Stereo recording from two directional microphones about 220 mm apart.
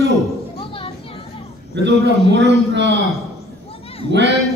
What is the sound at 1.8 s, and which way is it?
A man's voice, 50° right (ahead or behind).